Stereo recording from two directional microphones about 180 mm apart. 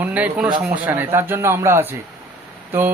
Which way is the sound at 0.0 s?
10° right (ahead or behind).